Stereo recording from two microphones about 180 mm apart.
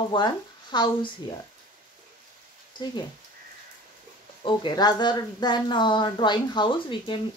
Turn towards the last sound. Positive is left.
turn(degrees=30)  # may be behind; listen again after turning